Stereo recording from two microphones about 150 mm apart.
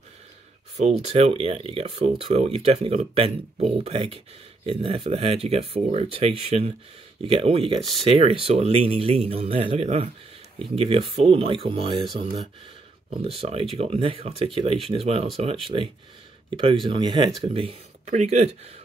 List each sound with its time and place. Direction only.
0.7 s speech: 45° right (ahead or behind)
13.4 s speech: 40° right (ahead or behind)
16.4 s speech: 30° right (ahead or behind); by 18.5 s 45° right (ahead or behind)